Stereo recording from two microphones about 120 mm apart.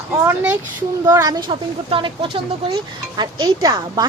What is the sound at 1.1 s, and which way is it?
Speech, 30° right (ahead or behind).